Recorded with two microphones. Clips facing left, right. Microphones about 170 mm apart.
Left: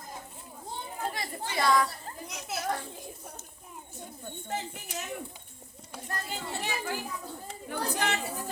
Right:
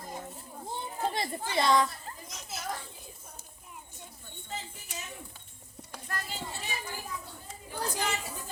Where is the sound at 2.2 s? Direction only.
65° left (ahead or behind).